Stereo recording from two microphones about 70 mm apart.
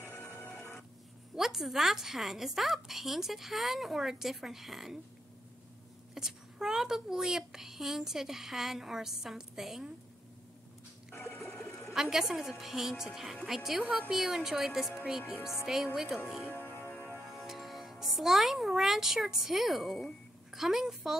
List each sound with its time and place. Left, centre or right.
0.0 s printer: left
1.3 s a child's voice: centre
6.1 s a child's voice: centre
11.1 s a sound: left
11.5 s a sound: centre
11.9 s a child's voice: centre
13.8 s a woman's voice: centre
14.1 s a child's voice: centre
16.5 s music: left
17.3 s a child's voice: centre